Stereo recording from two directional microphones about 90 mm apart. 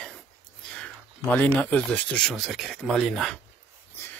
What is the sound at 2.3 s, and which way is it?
Speech, centre (ahead or behind).